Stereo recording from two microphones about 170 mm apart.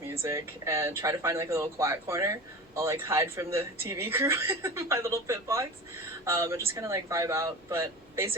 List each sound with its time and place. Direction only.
0.1 s speech: 15° right (ahead or behind)